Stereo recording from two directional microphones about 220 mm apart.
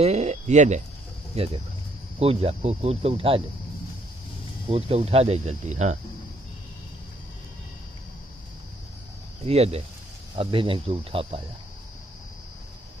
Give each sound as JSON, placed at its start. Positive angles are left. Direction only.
{"t": 0.0, "sound": "speech", "side_deg": -30}
{"t": 4.6, "sound": "speech", "side_deg": -25}
{"t": 9.4, "sound": "speech", "side_deg": -25}